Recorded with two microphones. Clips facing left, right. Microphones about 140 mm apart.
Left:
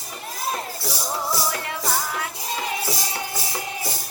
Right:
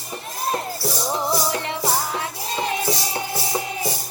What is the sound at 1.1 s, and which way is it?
Music, 25° right (ahead or behind).